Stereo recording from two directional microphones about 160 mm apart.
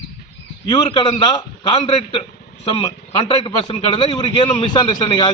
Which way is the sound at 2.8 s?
30° left (ahead or behind).